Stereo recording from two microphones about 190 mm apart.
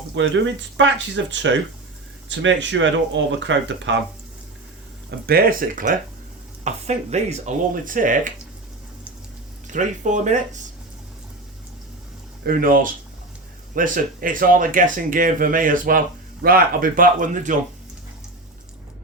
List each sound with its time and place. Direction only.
0.2 s speech: 75° right (ahead or behind)
5.2 s speech: 50° right (ahead or behind)
9.6 s speech: 40° right (ahead or behind)
12.4 s speech: 50° right (ahead or behind)